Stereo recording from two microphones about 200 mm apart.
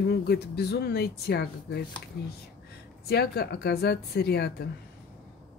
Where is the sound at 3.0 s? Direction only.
50° left (ahead or behind).